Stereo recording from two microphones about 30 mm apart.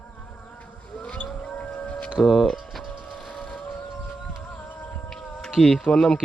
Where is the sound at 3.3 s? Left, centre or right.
Left.